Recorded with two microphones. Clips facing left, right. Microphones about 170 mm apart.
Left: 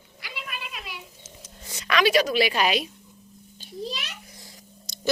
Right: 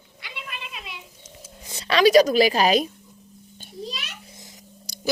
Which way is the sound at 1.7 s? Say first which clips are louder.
Right 6 dB; 30° right (ahead or behind).